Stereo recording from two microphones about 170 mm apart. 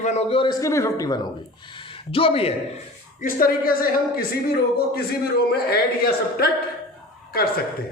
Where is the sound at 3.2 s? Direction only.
55° left (ahead or behind).